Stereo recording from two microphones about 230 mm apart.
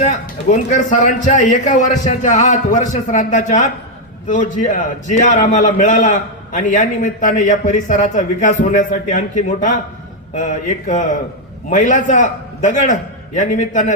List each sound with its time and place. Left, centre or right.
0.0 s a man's voice: left